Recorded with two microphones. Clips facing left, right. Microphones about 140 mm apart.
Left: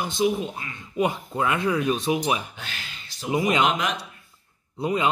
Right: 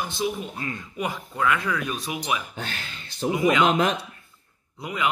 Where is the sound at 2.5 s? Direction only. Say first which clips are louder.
Right 5 dB; 45° right (ahead or behind).